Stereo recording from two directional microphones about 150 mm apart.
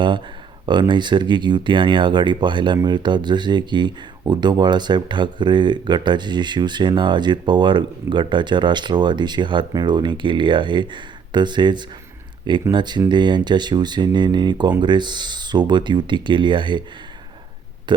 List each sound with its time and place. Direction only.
0.6 s speech: 30° right (ahead or behind)
17.9 s speech: 30° right (ahead or behind)